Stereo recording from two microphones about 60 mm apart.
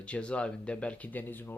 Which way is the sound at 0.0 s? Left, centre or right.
Centre.